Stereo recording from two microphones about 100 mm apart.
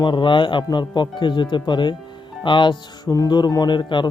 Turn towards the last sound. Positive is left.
turn(degrees=50)  # may be behind; listen again after turning